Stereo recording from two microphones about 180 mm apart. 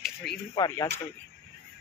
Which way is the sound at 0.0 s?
Centre (ahead or behind).